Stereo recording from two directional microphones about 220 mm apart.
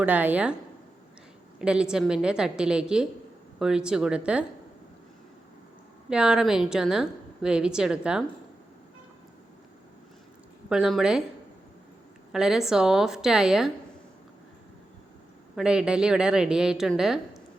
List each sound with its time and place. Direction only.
0.0 s speech: 5° right (ahead or behind)
1.5 s a woman's voice: 5° right (ahead or behind)
6.1 s a woman's voice: 5° right (ahead or behind)
10.7 s a woman's voice: centre (ahead or behind)
12.3 s a woman's voice: centre (ahead or behind)
15.5 s a woman's voice: 5° right (ahead or behind)